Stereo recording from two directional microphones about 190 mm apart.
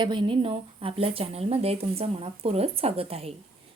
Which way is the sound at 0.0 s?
25° right (ahead or behind).